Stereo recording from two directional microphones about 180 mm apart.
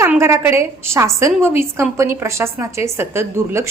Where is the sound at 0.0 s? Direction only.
15° right (ahead or behind).